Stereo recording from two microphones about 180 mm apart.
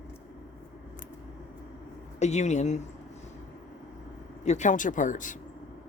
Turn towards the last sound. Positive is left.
turn(degrees=45)  # may be behind; listen again after turning